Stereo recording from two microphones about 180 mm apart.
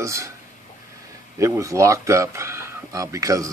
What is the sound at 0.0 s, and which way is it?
Speech, 15° right (ahead or behind).